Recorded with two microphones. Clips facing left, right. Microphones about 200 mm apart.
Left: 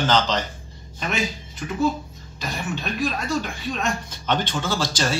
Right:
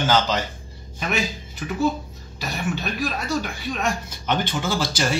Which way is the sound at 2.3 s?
5° right (ahead or behind).